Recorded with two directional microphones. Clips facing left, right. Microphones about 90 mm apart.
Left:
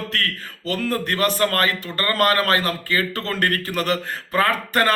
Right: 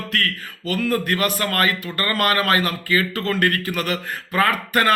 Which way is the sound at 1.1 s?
35° left (ahead or behind).